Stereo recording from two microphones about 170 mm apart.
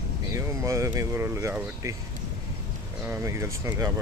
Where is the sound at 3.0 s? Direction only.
15° right (ahead or behind).